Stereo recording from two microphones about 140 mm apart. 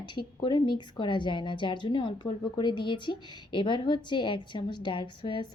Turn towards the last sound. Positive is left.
turn(degrees=35)  # may be behind; listen again after turning